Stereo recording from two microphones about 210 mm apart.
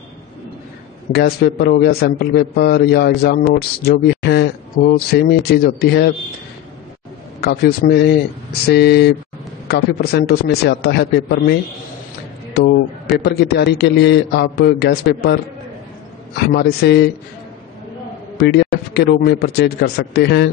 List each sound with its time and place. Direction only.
1.1 s a man's voice: 45° left (ahead or behind)
7.3 s a man's voice: 45° left (ahead or behind)
13.2 s a man's voice: 50° left (ahead or behind)
16.5 s a man's voice: 50° left (ahead or behind)
18.4 s a man's voice: 50° left (ahead or behind)